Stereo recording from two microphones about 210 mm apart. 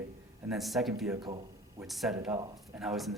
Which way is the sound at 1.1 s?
15° right (ahead or behind).